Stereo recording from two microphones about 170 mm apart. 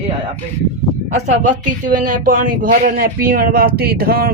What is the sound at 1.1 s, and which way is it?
Speech, 45° right (ahead or behind).